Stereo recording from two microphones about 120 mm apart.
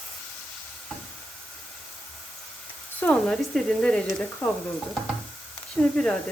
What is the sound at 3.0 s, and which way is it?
Speech, 5° left (ahead or behind).